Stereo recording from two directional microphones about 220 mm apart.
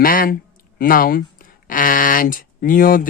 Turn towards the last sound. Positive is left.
turn(degrees=40)  # may be behind; listen again after turning